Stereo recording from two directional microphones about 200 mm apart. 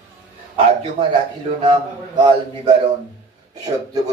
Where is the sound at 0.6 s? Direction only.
30° right (ahead or behind).